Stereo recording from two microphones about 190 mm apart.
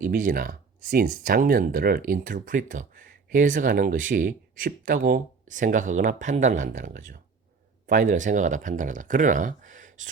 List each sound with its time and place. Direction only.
0.0 s speech: 45° right (ahead or behind)